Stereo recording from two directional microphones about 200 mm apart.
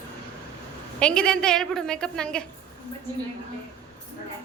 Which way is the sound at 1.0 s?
5° left (ahead or behind).